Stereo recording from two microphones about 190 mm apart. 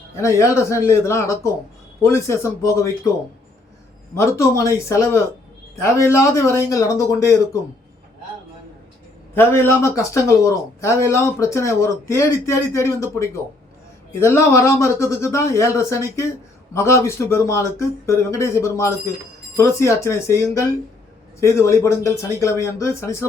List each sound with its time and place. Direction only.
0.3 s speech: 15° left (ahead or behind)
4.1 s speech: 15° left (ahead or behind)
9.3 s speech: 10° left (ahead or behind)